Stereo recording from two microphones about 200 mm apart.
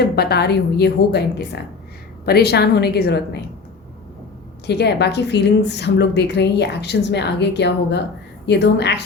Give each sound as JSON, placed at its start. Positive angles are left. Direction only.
{"t": 0.0, "sound": "a woman's voice", "side_deg": 55}
{"t": 4.6, "sound": "a woman's voice", "side_deg": 55}